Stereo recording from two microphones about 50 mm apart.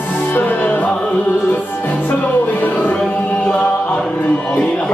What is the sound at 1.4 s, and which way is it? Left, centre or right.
Music, left.